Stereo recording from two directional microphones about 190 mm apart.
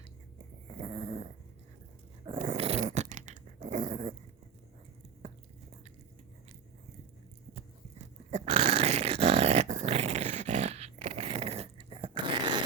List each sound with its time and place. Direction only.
0.8 s dog: 35° right (ahead or behind)
5.2 s biting: 35° right (ahead or behind)
7.5 s dog: 35° right (ahead or behind)